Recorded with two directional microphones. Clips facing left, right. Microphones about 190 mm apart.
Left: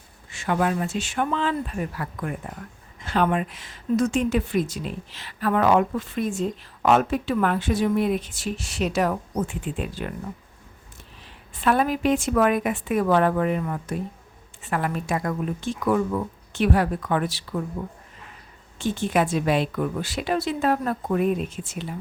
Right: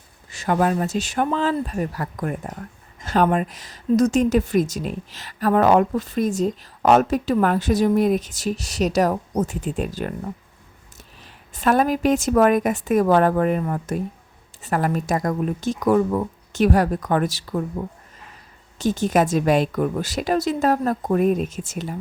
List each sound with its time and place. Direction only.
0.3 s speech: 40° right (ahead or behind)
11.5 s speech: 40° right (ahead or behind)
18.8 s speech: 40° right (ahead or behind)